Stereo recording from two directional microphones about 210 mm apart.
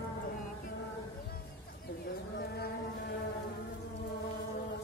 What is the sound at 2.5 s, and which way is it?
Music, 50° left (ahead or behind).